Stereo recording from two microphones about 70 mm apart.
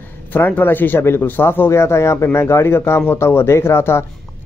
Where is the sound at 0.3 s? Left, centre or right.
Left.